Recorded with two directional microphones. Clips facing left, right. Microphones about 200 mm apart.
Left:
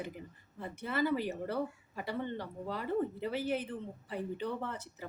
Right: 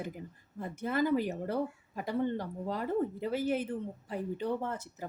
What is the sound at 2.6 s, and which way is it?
Speech, 45° right (ahead or behind).